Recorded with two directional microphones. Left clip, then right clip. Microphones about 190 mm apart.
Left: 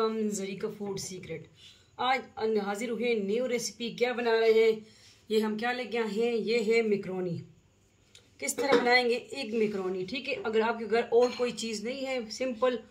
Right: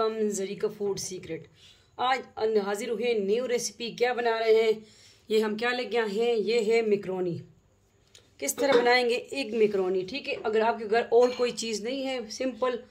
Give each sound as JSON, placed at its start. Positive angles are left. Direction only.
{"t": 0.0, "sound": "a woman's voice", "side_deg": -50}
{"t": 8.4, "sound": "a woman's voice", "side_deg": -50}